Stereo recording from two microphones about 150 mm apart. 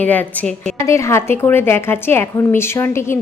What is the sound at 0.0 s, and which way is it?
Speech, 10° left (ahead or behind).